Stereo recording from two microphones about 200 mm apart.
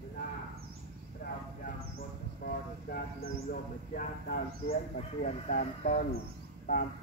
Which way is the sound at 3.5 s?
45° left (ahead or behind).